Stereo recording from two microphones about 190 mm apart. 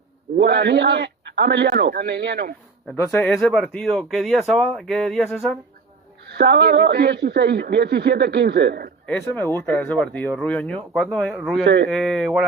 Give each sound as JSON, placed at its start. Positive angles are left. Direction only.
{"t": 0.3, "sound": "speech", "side_deg": -60}
{"t": 2.9, "sound": "speech", "side_deg": 10}
{"t": 6.3, "sound": "speech", "side_deg": -60}
{"t": 9.0, "sound": "speech", "side_deg": 10}
{"t": 11.6, "sound": "speech", "side_deg": -60}
{"t": 11.9, "sound": "speech", "side_deg": 5}